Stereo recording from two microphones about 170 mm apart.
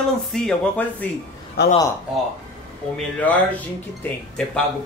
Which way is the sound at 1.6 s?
75° left (ahead or behind).